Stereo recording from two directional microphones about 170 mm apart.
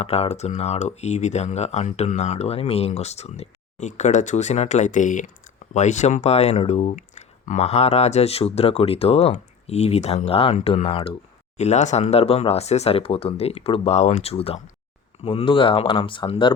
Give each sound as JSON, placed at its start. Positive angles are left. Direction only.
{"t": 0.0, "sound": "speech", "side_deg": 40}